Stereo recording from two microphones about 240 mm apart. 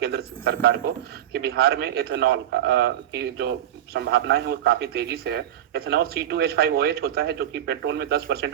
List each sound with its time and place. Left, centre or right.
0.0 s a man's voice: right